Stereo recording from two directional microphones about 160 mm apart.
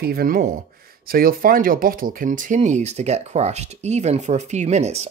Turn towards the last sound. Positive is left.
turn(degrees=-45)  # may be behind; listen again after turning